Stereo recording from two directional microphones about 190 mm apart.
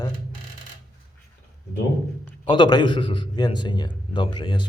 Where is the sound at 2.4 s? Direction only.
25° left (ahead or behind).